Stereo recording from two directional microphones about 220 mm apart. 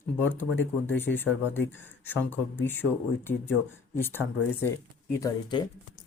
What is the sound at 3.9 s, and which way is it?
Speech, 10° left (ahead or behind).